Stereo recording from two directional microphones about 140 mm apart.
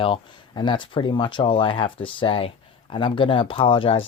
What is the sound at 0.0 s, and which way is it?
Speech, 35° left (ahead or behind).